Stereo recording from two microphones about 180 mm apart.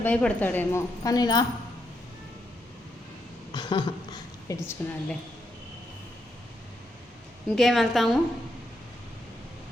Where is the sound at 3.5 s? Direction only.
25° left (ahead or behind).